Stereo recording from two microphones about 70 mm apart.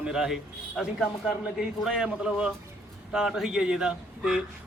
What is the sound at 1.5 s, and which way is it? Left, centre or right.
A man's voice, centre.